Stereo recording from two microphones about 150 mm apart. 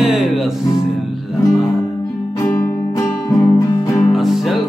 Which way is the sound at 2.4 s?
20° left (ahead or behind).